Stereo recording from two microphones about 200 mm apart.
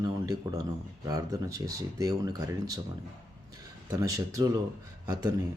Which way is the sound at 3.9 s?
15° right (ahead or behind).